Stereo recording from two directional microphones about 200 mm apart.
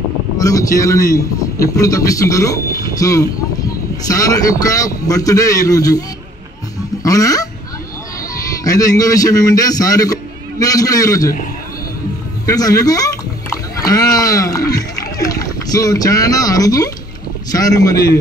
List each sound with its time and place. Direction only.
0.4 s a man's voice: 15° left (ahead or behind)
7.0 s goose: 15° left (ahead or behind)
8.6 s a man's voice: 15° left (ahead or behind)
12.4 s a man's voice: 20° left (ahead or behind)